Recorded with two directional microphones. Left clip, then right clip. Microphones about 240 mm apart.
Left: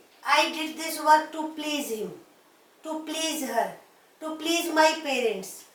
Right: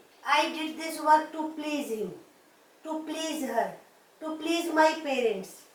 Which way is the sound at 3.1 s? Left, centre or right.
Centre.